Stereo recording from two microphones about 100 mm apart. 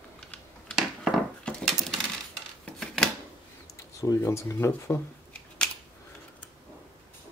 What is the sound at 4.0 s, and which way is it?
Speech, 30° left (ahead or behind).